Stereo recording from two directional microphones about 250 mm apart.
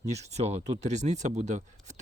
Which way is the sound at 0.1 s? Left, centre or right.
Right.